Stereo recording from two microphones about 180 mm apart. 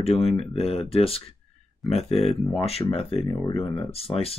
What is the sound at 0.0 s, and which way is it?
Speech, 35° left (ahead or behind).